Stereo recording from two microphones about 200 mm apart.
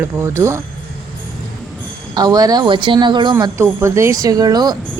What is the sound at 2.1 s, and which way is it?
A woman's voice, 20° right (ahead or behind).